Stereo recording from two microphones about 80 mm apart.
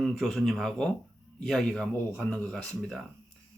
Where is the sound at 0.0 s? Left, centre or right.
Centre.